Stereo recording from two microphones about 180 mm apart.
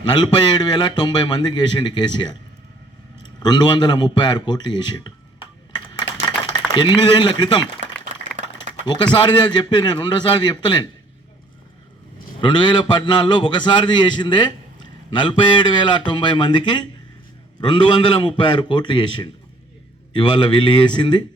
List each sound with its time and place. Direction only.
0.0 s a man's voice: 25° left (ahead or behind)
3.4 s a man's voice: 25° left (ahead or behind)
6.7 s a man's voice: 25° left (ahead or behind)
8.7 s a sound: 40° right (ahead or behind)
9.1 s a man's voice: 25° left (ahead or behind)
12.4 s a man's voice: 25° left (ahead or behind)